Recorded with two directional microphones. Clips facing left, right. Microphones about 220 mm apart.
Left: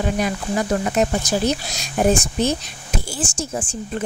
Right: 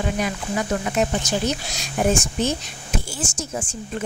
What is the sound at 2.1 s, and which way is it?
Speech, 35° left (ahead or behind).